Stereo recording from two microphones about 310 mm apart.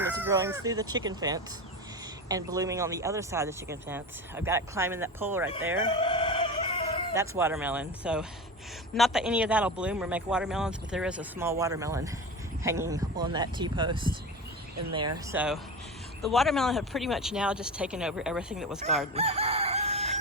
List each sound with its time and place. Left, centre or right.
0.0 s speech: centre
6.0 s chicken: centre
7.1 s speech: centre
15.3 s speech: centre
19.1 s chicken: centre